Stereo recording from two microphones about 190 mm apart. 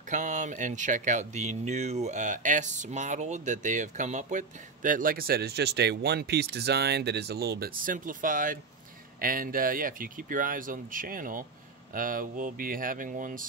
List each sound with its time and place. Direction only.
0.1 s speech: 40° right (ahead or behind)